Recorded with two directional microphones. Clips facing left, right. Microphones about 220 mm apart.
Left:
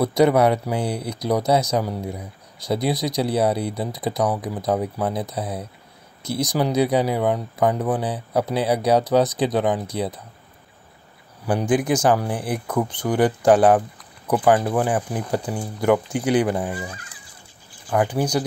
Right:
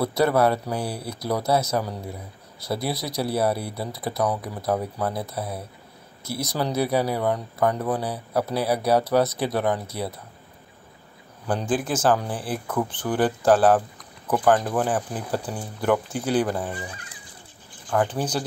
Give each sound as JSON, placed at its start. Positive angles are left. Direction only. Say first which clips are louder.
{"t": 0.0, "sound": "speech", "louder": "left 4 dB", "side_deg": 15}
{"t": 11.4, "sound": "speech", "louder": "left 5 dB", "side_deg": 15}
{"t": 17.8, "sound": "speech", "louder": "left 3 dB", "side_deg": 10}